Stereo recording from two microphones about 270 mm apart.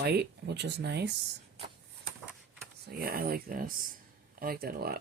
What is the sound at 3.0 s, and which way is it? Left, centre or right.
Speech, right.